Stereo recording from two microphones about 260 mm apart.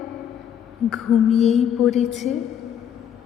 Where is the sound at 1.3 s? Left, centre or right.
Left.